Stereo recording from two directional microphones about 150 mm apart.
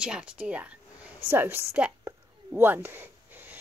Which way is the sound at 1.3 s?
15° right (ahead or behind).